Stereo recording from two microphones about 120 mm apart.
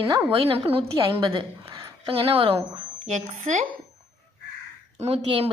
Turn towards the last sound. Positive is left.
turn(degrees=-60)  # may be behind; listen again after turning